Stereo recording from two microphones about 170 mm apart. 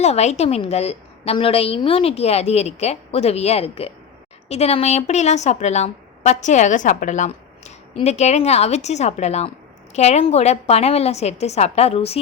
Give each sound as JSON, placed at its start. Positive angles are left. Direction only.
{"t": 0.0, "sound": "a woman's voice", "side_deg": 40}